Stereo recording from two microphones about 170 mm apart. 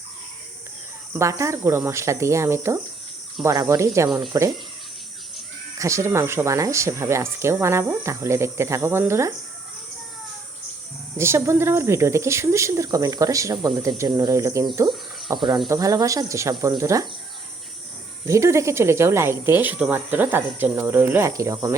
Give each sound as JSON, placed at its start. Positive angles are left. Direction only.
{"t": 1.1, "sound": "speech", "side_deg": -15}
{"t": 5.8, "sound": "speech", "side_deg": -15}
{"t": 11.2, "sound": "speech", "side_deg": -15}
{"t": 18.3, "sound": "speech", "side_deg": -15}